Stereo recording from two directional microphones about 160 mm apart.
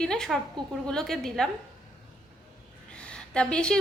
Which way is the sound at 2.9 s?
5° left (ahead or behind).